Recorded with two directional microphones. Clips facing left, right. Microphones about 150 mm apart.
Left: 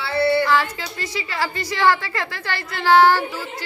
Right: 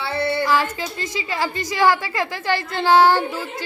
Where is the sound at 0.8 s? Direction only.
20° right (ahead or behind).